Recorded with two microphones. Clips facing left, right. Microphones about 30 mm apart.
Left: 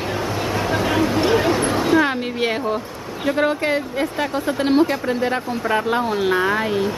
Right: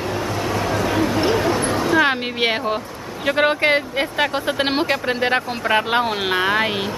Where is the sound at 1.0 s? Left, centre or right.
Centre.